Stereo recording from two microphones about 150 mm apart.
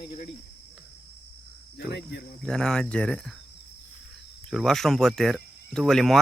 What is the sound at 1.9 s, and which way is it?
Cricket, 90° left.